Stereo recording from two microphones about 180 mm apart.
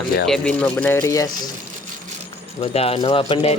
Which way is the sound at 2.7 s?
30° left (ahead or behind).